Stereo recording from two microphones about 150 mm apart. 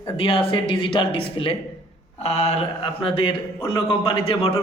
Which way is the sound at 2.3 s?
45° left (ahead or behind).